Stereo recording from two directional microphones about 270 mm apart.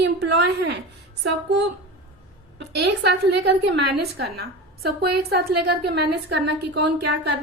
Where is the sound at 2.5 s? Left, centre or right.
Right.